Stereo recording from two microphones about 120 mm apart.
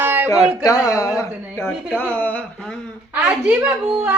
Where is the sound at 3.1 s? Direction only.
10° right (ahead or behind).